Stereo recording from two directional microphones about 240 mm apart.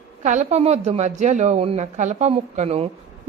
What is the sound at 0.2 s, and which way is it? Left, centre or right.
A woman's voice, right.